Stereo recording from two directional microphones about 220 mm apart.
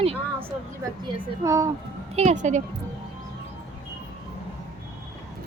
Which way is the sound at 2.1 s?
30° right (ahead or behind).